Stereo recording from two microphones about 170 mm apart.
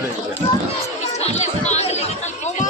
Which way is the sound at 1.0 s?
40° left (ahead or behind).